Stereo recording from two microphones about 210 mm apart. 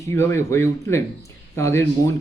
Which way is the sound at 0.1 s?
10° left (ahead or behind).